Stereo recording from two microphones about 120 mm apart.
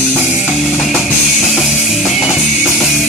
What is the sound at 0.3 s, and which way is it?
Music, centre (ahead or behind).